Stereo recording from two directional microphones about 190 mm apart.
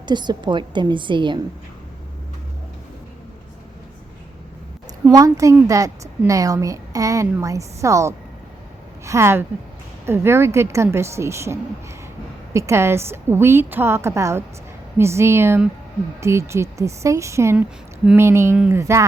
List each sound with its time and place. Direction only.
0.0 s a woman's voice: 25° right (ahead or behind)
5.1 s a woman's voice: 20° right (ahead or behind)
12.5 s a woman's voice: 15° right (ahead or behind)